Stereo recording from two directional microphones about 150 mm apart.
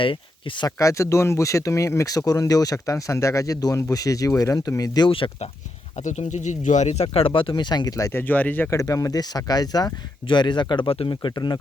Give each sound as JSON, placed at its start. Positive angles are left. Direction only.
{"t": 0.0, "sound": "speech", "side_deg": 35}
{"t": 0.8, "sound": "speech", "side_deg": 20}
{"t": 6.0, "sound": "speech", "side_deg": 55}